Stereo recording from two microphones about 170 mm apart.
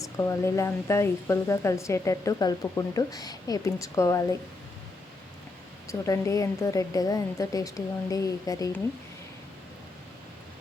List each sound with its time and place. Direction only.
0.0 s speech: 15° left (ahead or behind)
5.9 s a woman's voice: 20° left (ahead or behind)